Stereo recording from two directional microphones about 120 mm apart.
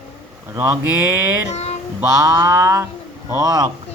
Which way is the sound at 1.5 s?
65° left (ahead or behind).